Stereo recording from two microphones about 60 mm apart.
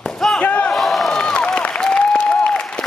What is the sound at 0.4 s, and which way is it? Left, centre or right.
Crowd, left.